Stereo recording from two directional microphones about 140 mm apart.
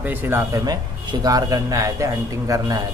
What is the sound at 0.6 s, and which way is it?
A man's voice, 30° right (ahead or behind).